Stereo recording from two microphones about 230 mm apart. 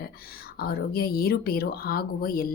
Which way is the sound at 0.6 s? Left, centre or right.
Left.